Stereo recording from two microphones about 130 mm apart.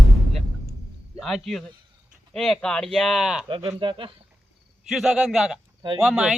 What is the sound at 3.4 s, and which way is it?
Speech, 40° right (ahead or behind).